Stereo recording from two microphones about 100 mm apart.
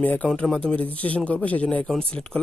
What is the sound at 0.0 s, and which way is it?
Speech, 15° left (ahead or behind).